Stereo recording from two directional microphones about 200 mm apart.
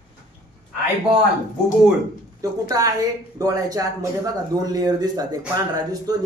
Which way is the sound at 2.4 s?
15° right (ahead or behind).